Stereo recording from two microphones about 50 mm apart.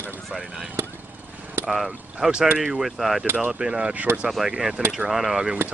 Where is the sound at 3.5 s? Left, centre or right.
Centre.